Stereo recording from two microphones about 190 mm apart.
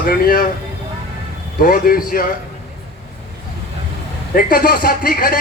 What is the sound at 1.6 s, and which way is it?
Speech, 50° left (ahead or behind).